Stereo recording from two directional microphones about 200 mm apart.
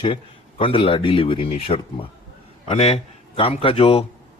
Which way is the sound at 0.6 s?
25° left (ahead or behind).